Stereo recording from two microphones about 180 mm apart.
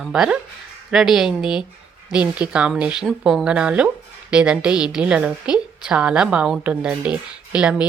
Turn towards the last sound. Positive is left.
turn(degrees=-5)  # may be behind; listen again after turning